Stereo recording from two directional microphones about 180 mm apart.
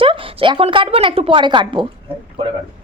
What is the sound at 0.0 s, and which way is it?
A woman's voice, 30° right (ahead or behind).